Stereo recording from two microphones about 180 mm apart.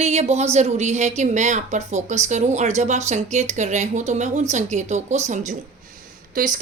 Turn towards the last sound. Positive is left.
turn(degrees=-45)  # may be behind; listen again after turning